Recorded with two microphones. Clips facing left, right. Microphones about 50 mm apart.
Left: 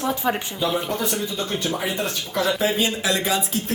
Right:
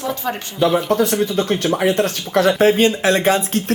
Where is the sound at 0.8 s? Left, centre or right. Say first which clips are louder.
Right 9 dB; right.